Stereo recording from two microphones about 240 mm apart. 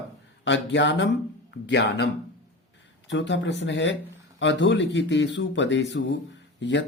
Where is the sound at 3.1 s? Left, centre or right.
Left.